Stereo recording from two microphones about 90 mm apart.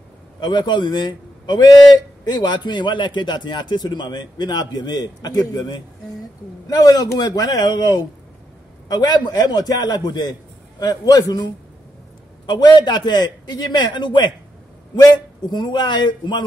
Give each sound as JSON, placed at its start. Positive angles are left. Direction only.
{"t": 0.4, "sound": "a man's voice", "side_deg": 60}
{"t": 12.4, "sound": "a man's voice", "side_deg": 50}